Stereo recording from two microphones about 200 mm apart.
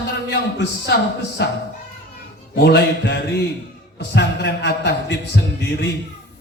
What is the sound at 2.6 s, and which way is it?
A man's voice, 55° left (ahead or behind).